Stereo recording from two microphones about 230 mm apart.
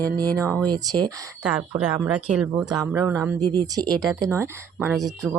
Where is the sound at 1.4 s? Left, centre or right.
Centre.